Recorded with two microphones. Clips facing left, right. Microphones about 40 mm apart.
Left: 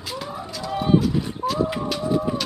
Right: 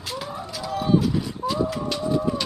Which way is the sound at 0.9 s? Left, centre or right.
Centre.